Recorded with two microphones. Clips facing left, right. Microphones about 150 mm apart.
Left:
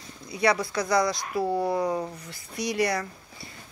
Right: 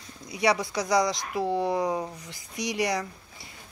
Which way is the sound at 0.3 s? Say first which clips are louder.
Left 1 dB; 15° right (ahead or behind).